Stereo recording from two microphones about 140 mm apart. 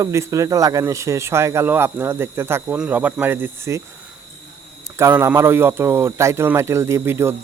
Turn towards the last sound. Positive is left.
turn(degrees=-15)  # may be behind; listen again after turning